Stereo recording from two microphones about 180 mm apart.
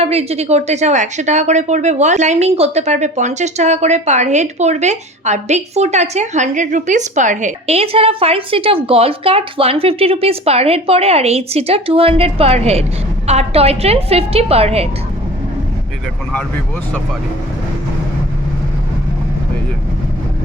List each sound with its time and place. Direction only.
0.0 s a woman's voice: 35° right (ahead or behind)